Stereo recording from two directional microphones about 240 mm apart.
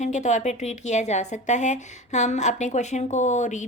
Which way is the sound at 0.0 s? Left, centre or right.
Left.